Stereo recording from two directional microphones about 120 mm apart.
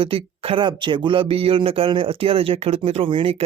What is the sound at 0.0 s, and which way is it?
Speech, 50° right (ahead or behind).